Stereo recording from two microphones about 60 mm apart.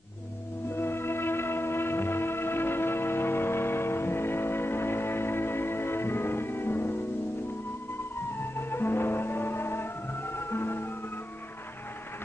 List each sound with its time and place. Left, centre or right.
0.7 s music: left
8.5 s music: left